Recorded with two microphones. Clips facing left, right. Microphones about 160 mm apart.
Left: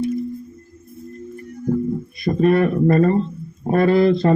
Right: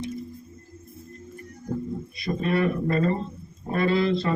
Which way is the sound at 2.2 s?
50° left (ahead or behind).